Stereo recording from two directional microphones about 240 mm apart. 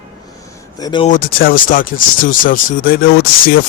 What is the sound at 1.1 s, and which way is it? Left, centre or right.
Speech, left.